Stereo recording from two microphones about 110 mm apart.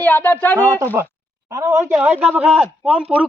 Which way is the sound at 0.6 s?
35° right (ahead or behind).